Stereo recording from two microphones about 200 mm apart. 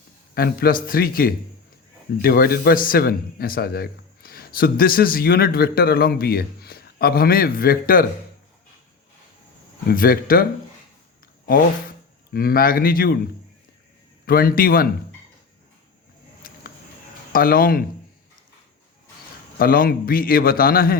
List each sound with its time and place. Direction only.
0.3 s a man's voice: 50° left (ahead or behind)
9.9 s a man's voice: 45° left (ahead or behind)
12.3 s a man's voice: 45° left (ahead or behind)
14.3 s a man's voice: 50° left (ahead or behind)
16.4 s a sound: 45° left (ahead or behind)
17.3 s a man's voice: 45° left (ahead or behind)
19.5 s a man's voice: 45° left (ahead or behind)